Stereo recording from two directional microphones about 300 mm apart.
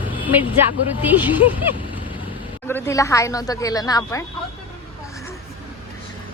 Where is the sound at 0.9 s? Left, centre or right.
Centre.